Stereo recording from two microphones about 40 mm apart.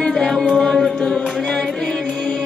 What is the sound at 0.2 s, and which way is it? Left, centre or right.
Music, centre.